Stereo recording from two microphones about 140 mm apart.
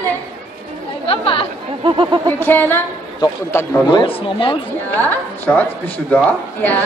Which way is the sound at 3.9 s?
35° left (ahead or behind).